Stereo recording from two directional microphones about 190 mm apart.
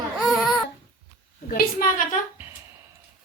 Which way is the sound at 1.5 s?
45° left (ahead or behind).